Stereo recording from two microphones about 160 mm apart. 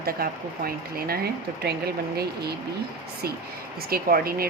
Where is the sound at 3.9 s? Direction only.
70° right (ahead or behind).